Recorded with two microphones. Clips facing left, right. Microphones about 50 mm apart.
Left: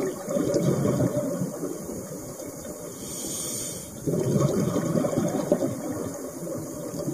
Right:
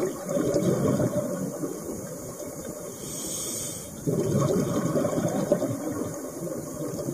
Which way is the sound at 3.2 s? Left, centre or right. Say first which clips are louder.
Left 2 dB; centre.